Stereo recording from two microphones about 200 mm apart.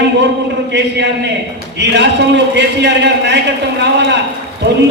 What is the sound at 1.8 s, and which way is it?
A man's voice, 60° right (ahead or behind).